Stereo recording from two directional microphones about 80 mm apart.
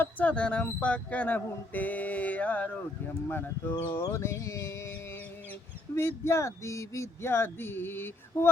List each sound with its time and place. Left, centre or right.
0.0 s speech: centre
3.9 s speech: left